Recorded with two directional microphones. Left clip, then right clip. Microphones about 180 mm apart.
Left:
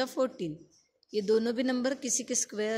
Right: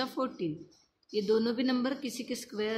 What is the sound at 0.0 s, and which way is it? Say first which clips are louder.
A woman's voice: left 3 dB; 30° left (ahead or behind).